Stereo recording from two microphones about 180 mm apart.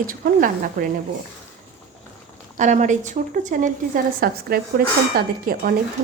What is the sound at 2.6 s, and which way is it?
A woman's voice, 45° right (ahead or behind).